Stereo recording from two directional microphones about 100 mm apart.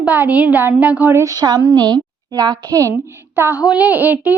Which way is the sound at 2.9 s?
25° right (ahead or behind).